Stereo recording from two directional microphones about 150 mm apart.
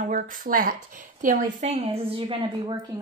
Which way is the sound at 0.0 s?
60° right (ahead or behind).